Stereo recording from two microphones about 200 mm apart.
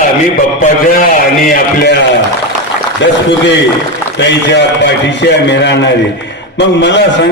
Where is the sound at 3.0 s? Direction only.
65° left (ahead or behind).